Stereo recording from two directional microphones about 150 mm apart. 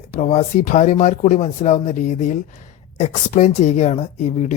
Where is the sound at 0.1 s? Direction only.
50° left (ahead or behind).